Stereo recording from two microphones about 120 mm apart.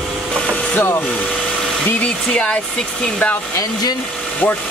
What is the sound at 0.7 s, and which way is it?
Speech, 20° left (ahead or behind).